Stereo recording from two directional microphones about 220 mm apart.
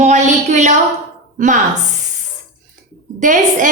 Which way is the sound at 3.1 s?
35° right (ahead or behind).